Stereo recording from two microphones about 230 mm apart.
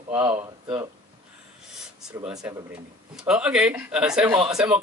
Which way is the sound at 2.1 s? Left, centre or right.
Centre.